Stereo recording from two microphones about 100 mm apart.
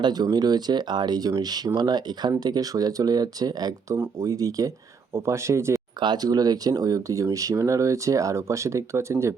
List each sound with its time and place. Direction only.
0.0 s speech: 45° right (ahead or behind)
6.0 s speech: 45° right (ahead or behind); by 9.3 s 30° right (ahead or behind)